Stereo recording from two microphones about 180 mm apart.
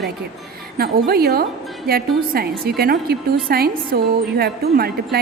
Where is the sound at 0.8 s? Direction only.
60° right (ahead or behind).